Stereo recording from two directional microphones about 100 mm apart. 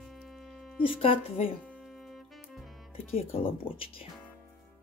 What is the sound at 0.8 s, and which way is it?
Speech, 70° left (ahead or behind).